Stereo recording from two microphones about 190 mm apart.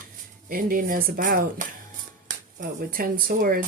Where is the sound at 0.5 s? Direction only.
45° right (ahead or behind).